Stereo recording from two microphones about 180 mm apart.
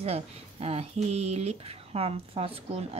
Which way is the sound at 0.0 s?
35° right (ahead or behind).